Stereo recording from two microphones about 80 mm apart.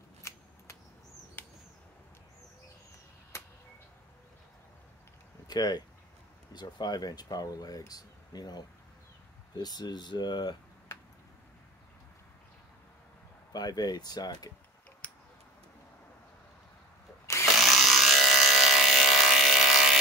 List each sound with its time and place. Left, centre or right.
1.4 s bird flight: left
5.5 s speech: left
13.5 s speech: left
15.0 s tick: centre
17.5 s a sound: centre